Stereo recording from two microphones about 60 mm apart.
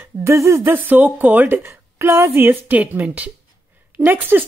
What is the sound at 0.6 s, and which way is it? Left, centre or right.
Speech, right.